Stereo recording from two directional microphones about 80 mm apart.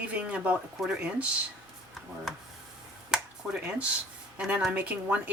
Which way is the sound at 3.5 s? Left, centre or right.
Centre.